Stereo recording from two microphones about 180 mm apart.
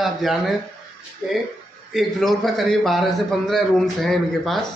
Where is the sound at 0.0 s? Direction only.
Centre (ahead or behind).